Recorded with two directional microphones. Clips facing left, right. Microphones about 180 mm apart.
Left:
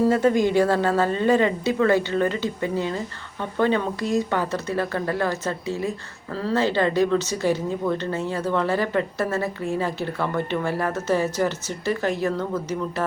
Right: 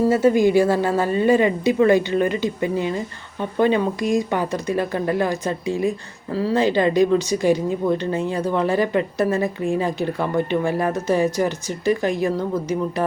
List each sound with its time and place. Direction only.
0.0 s a woman's voice: 5° right (ahead or behind)